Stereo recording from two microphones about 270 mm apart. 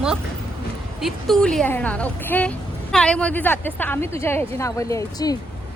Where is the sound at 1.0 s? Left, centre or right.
Centre.